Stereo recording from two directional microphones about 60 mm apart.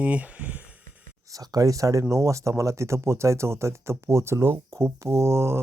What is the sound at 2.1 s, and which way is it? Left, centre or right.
Speech, right.